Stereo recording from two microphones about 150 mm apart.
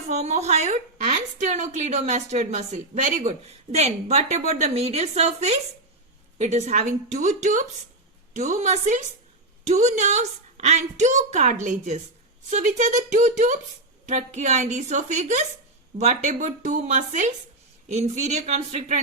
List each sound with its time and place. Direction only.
0.1 s a woman's voice: 50° right (ahead or behind)